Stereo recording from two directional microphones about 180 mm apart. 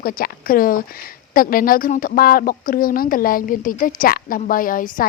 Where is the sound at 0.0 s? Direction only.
55° left (ahead or behind).